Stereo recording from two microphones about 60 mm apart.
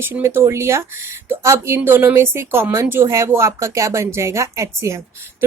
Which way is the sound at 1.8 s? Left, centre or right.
Right.